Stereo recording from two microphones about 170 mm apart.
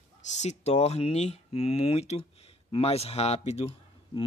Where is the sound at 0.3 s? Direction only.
40° left (ahead or behind).